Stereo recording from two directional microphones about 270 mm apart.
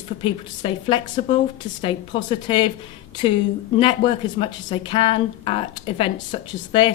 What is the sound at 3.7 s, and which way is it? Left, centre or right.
A woman's voice, centre.